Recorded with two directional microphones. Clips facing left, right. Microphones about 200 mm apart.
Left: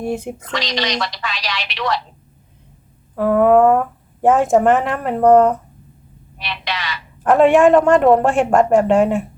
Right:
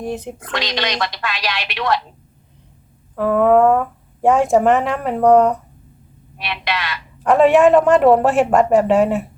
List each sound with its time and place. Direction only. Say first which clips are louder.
0.0 s speech: left 2 dB; 10° left (ahead or behind)
0.5 s a woman's voice: even; 55° right (ahead or behind)
3.2 s speech: left 1 dB; 5° left (ahead or behind)
6.4 s a sound: right 2 dB; 55° right (ahead or behind)
7.2 s speech: even; centre (ahead or behind)